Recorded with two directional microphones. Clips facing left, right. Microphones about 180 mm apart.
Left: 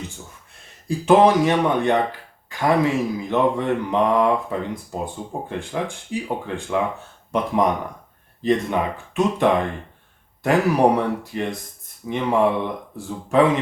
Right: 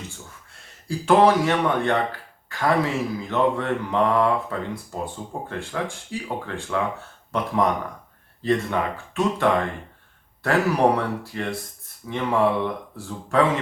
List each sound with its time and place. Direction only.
0.9 s speech: 20° left (ahead or behind)